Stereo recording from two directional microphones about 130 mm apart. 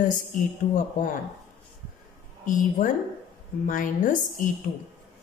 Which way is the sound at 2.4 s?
90° left.